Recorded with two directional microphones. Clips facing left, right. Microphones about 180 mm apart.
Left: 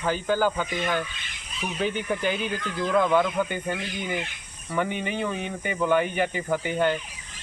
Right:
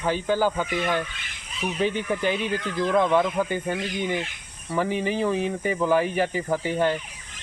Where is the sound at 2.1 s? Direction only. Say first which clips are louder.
Right 2 dB; centre (ahead or behind).